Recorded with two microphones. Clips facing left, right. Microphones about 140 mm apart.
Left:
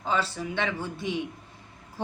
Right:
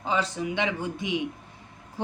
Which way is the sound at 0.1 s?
15° right (ahead or behind).